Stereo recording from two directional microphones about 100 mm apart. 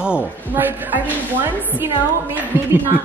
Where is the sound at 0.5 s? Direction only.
20° right (ahead or behind).